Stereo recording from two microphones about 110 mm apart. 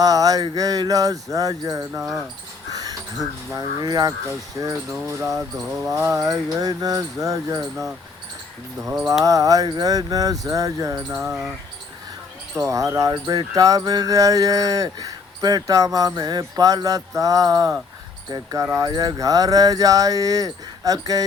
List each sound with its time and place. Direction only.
0.0 s speech: 35° right (ahead or behind)
3.5 s speech: 40° right (ahead or behind)
8.9 s speech: 25° right (ahead or behind)
12.5 s speech: 30° right (ahead or behind)
18.6 s speech: 25° right (ahead or behind)
18.9 s speech: 35° right (ahead or behind)